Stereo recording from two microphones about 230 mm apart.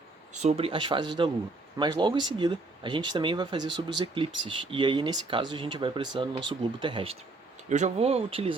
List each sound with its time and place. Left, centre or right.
0.4 s speech: right